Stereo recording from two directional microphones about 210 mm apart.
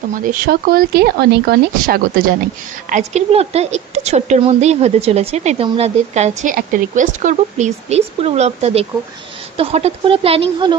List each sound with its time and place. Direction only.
0.1 s speech: 40° right (ahead or behind)
2.9 s a woman's voice: 35° right (ahead or behind)